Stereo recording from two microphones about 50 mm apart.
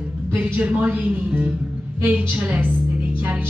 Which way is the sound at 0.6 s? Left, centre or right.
Right.